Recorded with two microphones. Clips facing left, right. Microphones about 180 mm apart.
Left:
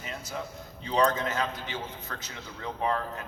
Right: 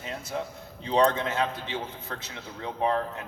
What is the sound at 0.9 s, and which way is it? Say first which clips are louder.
A man's voice: right 2 dB; 30° right (ahead or behind).